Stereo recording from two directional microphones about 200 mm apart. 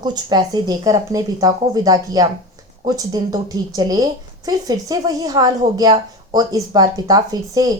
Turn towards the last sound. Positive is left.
turn(degrees=-20)  # may be behind; listen again after turning